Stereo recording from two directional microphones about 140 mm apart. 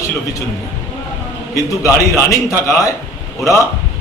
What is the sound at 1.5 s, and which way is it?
A man's voice, 20° left (ahead or behind).